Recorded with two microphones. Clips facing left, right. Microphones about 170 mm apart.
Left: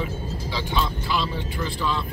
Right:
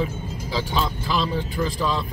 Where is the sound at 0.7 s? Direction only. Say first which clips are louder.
Left 1 dB; 40° right (ahead or behind).